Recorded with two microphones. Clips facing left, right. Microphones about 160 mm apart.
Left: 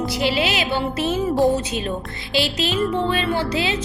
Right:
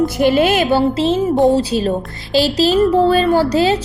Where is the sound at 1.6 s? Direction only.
35° right (ahead or behind).